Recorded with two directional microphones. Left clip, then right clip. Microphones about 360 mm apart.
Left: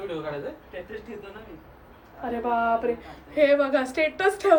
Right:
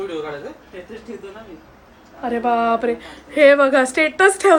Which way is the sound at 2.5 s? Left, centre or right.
Right.